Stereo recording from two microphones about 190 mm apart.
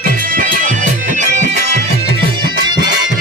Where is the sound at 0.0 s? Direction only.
45° right (ahead or behind).